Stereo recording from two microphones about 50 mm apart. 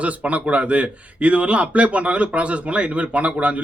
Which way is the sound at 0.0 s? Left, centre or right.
Right.